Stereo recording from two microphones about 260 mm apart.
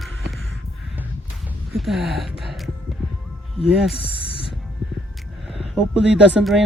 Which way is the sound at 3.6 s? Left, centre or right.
Left.